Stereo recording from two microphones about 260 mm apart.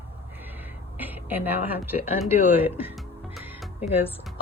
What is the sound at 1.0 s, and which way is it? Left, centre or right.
Speech, centre.